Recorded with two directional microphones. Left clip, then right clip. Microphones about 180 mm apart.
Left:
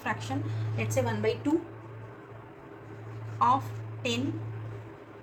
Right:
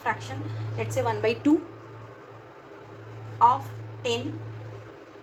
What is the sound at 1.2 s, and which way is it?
Speech, 50° right (ahead or behind).